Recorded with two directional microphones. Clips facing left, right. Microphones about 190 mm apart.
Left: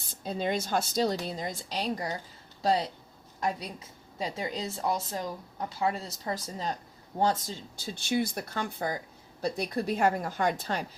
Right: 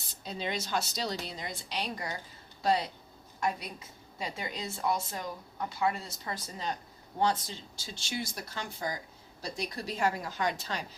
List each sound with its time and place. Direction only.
0.1 s speech: 50° left (ahead or behind); by 2.8 s 35° left (ahead or behind)
4.2 s speech: 35° left (ahead or behind); by 10.8 s 50° left (ahead or behind)